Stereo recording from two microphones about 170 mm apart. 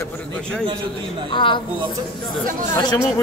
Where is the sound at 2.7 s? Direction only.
20° left (ahead or behind).